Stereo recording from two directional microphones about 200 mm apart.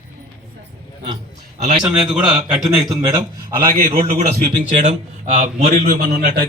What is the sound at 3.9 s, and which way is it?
A man's voice, 35° right (ahead or behind).